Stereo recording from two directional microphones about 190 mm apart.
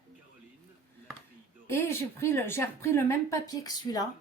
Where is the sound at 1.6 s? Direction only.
15° left (ahead or behind).